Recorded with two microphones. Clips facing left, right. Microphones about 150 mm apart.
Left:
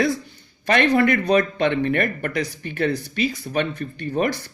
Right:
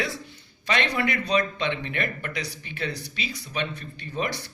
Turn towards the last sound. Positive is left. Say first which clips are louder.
# left 7 dB
turn(degrees=55)  # may be behind; listen again after turning